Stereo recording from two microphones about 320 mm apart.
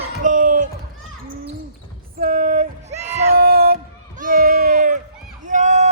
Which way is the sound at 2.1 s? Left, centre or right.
Right.